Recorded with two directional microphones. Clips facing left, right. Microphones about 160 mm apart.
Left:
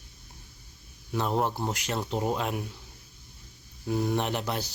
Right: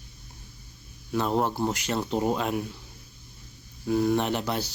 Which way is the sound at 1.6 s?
10° left (ahead or behind).